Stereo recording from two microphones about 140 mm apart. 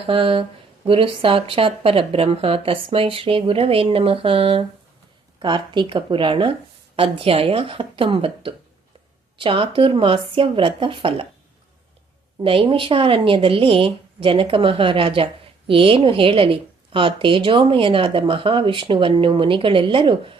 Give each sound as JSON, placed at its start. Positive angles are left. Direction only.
{"t": 0.1, "sound": "speech", "side_deg": -40}
{"t": 12.4, "sound": "speech", "side_deg": -40}